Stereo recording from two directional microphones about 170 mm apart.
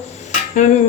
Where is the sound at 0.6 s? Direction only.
45° left (ahead or behind).